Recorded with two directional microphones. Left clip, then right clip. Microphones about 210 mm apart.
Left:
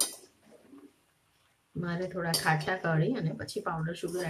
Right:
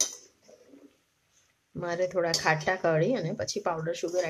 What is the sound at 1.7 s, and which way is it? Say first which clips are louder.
Speech: right 7 dB; 45° right (ahead or behind).